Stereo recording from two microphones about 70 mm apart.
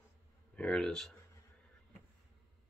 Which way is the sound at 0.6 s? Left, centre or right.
Centre.